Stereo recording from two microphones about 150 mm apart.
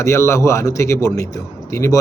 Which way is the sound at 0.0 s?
20° left (ahead or behind).